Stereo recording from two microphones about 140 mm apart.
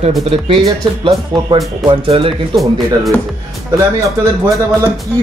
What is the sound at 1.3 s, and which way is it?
Speech, centre (ahead or behind).